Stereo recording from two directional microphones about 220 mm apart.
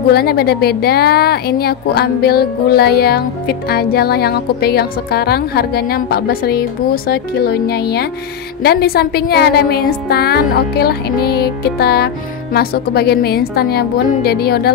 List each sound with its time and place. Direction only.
0.1 s speech: 45° left (ahead or behind)